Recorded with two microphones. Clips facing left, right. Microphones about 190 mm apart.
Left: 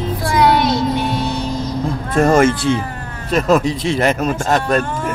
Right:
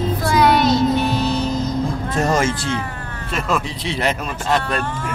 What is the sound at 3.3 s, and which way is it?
A man's voice, 45° left (ahead or behind).